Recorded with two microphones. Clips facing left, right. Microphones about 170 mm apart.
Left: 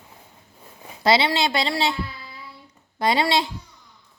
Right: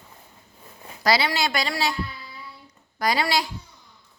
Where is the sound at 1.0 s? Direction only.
25° left (ahead or behind).